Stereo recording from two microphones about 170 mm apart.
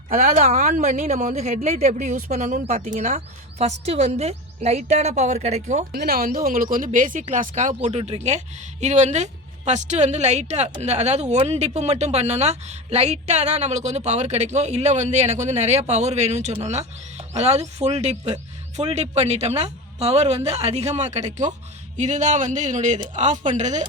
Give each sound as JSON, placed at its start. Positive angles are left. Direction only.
{"t": 0.1, "sound": "speech", "side_deg": -50}
{"t": 5.9, "sound": "speech", "side_deg": -65}